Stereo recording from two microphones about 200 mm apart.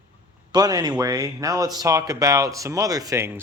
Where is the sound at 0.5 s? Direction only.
20° right (ahead or behind).